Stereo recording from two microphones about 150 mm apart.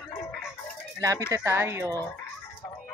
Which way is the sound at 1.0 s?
20° right (ahead or behind).